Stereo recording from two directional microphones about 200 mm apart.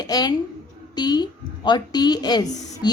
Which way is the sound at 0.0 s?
20° left (ahead or behind).